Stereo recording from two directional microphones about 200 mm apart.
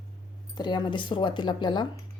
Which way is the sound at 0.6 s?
20° left (ahead or behind).